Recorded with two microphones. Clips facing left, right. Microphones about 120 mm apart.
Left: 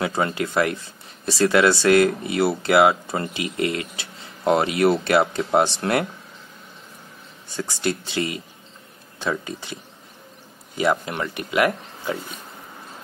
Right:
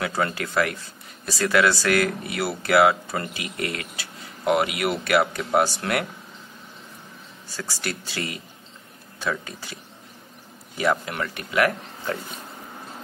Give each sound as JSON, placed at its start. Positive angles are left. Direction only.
{"t": 0.0, "sound": "speech", "side_deg": 20}
{"t": 7.4, "sound": "speech", "side_deg": 20}
{"t": 10.8, "sound": "speech", "side_deg": 25}